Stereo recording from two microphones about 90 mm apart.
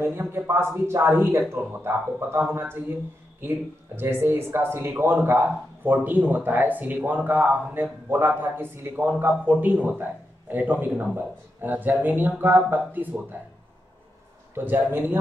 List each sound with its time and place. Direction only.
0.0 s speech: 25° right (ahead or behind)
14.5 s speech: 25° right (ahead or behind)